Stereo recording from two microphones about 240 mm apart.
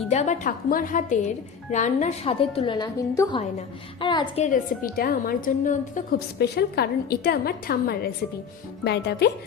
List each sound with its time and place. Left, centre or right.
0.1 s a woman's voice: left
4.4 s a woman's voice: left